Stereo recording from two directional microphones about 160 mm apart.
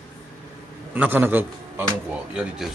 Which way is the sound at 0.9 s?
10° right (ahead or behind).